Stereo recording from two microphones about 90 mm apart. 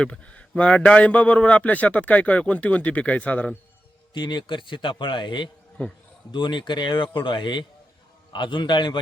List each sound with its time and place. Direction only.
0.0 s a man's voice: 10° left (ahead or behind)
4.1 s a man's voice: 55° left (ahead or behind)